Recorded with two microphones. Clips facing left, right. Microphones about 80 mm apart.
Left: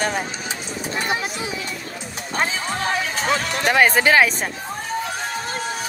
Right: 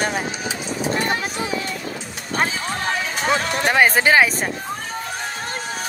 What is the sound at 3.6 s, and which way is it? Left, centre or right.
Speech, centre.